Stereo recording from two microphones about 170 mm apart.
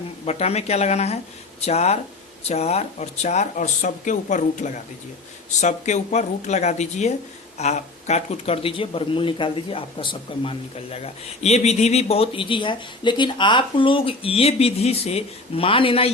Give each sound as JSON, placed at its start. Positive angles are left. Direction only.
{"t": 0.3, "sound": "speech", "side_deg": 40}